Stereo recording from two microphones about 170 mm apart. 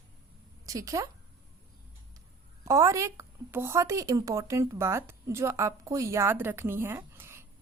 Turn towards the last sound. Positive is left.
turn(degrees=-15)  # may be behind; listen again after turning